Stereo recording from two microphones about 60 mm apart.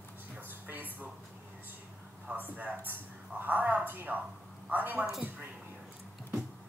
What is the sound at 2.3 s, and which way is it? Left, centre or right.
A woman's voice, right.